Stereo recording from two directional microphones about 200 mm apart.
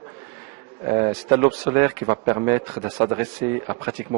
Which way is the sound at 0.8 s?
20° right (ahead or behind).